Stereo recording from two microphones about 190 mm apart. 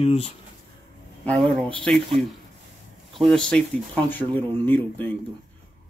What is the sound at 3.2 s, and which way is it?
Speech, centre (ahead or behind).